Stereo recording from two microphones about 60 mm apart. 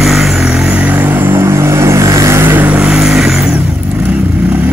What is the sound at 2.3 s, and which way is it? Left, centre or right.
Vehicle, right.